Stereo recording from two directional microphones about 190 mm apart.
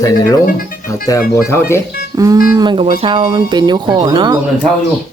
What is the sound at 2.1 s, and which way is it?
Speech, 20° right (ahead or behind).